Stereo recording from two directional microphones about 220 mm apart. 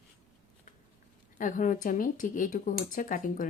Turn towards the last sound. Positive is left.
turn(degrees=40)  # may be behind; listen again after turning